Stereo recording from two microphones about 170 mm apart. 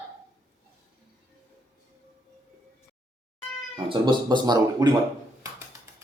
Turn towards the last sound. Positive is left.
turn(degrees=-25)  # may be behind; listen again after turning